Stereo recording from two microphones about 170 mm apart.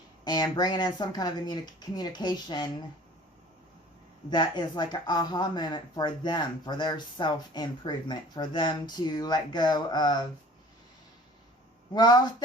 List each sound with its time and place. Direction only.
0.3 s speech: 25° left (ahead or behind)
4.3 s speech: 25° left (ahead or behind)
11.9 s speech: 25° left (ahead or behind)